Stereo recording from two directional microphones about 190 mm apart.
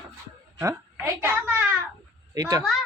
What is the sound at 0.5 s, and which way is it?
Speech, 15° right (ahead or behind).